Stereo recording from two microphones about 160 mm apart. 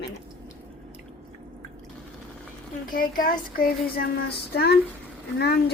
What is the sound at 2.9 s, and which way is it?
A child's voice, 60° left (ahead or behind).